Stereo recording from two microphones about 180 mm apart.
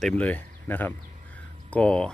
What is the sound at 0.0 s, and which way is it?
Speech, 5° left (ahead or behind).